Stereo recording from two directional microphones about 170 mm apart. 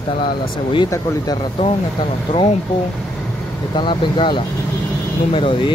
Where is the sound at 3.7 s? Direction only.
30° left (ahead or behind).